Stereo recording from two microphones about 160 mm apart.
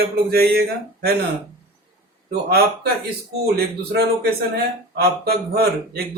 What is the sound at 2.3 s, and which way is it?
Speech, 80° right.